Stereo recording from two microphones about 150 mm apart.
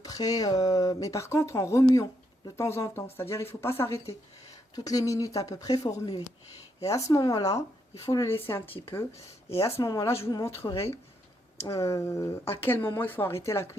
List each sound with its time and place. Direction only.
0.0 s speech: 25° left (ahead or behind)
9.1 s speech: 40° left (ahead or behind)
9.6 s speech: 20° left (ahead or behind)
11.6 s speech: 20° left (ahead or behind)